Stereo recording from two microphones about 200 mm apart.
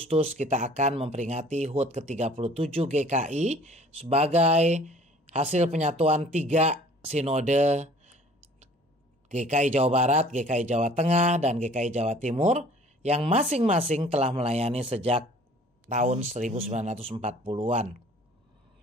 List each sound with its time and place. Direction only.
0.1 s speech: 35° right (ahead or behind)
9.3 s speech: 35° right (ahead or behind)